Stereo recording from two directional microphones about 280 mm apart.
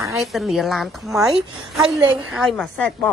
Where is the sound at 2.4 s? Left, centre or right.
Centre.